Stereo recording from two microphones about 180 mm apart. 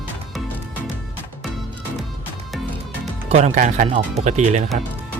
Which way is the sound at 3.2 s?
35° right (ahead or behind).